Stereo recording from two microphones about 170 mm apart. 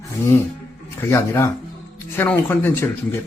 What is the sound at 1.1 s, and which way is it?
Speech, 15° left (ahead or behind).